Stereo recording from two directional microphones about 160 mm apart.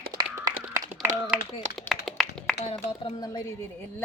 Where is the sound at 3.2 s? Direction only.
25° left (ahead or behind).